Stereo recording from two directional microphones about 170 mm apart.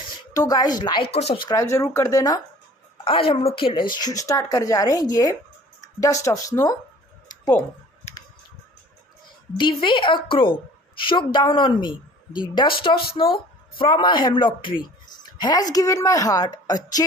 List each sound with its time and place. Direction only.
0.3 s a woman's voice: 20° left (ahead or behind)
3.0 s a woman's voice: 30° left (ahead or behind)
9.6 s a woman's voice: 30° left (ahead or behind)